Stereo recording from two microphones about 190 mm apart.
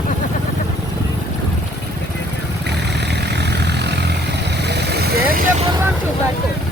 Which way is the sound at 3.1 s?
60° right (ahead or behind).